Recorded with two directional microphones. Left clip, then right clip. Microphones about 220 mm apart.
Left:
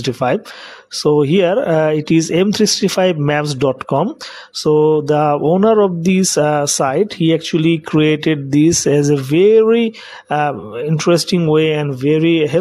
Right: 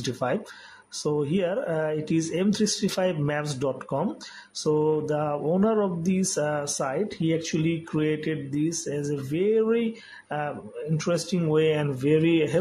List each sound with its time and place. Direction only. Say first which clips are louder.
0.0 s speech: left 11 dB; 40° left (ahead or behind)
11.0 s speech: left 13 dB; 45° left (ahead or behind)